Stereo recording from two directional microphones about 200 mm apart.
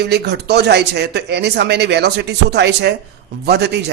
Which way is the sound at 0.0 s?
55° right (ahead or behind).